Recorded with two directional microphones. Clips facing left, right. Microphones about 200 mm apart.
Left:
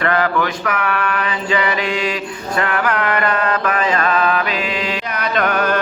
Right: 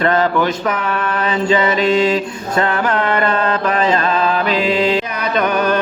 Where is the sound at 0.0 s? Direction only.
25° right (ahead or behind).